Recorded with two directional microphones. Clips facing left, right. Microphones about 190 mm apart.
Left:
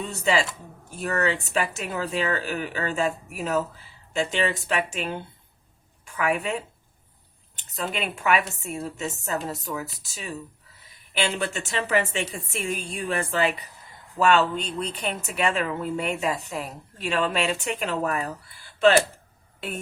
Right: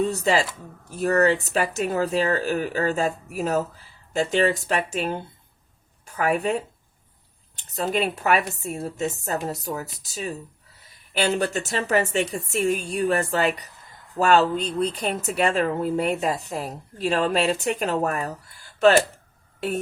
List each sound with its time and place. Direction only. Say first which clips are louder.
0.0 s speech: right 3 dB; 35° right (ahead or behind)
7.8 s speech: right 5 dB; 40° right (ahead or behind)
19.5 s speech: right 7 dB; 40° right (ahead or behind)